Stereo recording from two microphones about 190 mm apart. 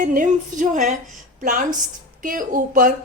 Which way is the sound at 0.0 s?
45° right (ahead or behind).